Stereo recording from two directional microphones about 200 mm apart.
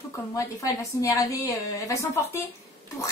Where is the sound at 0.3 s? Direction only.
15° left (ahead or behind).